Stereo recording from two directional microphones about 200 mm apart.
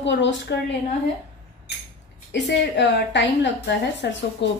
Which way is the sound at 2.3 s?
60° left (ahead or behind).